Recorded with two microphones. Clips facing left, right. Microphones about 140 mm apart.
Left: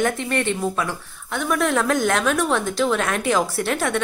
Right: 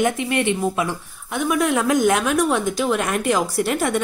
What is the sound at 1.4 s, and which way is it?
Speech, centre (ahead or behind).